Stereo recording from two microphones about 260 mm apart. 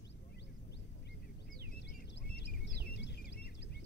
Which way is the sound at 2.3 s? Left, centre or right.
Left.